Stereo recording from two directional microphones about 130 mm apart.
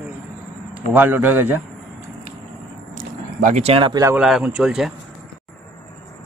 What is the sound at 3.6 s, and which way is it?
Speech, 45° right (ahead or behind).